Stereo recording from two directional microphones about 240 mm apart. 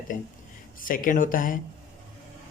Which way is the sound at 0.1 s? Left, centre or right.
Left.